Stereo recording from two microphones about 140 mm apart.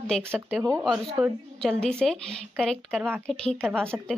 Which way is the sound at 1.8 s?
5° left (ahead or behind).